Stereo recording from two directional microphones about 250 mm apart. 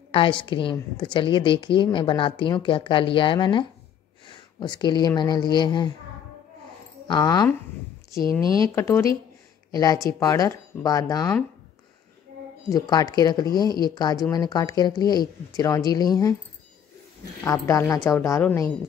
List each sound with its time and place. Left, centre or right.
0.1 s a woman's voice: left
7.1 s speech: centre
8.2 s speech: centre
8.7 s speech: centre
12.6 s speech: centre
17.4 s speech: centre